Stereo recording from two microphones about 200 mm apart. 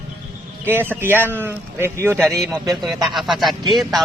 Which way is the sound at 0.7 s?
10° right (ahead or behind).